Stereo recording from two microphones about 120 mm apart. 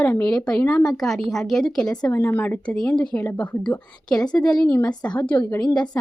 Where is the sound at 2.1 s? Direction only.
15° left (ahead or behind).